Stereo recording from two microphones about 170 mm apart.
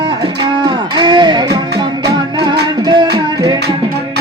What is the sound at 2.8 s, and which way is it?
Music, 25° right (ahead or behind).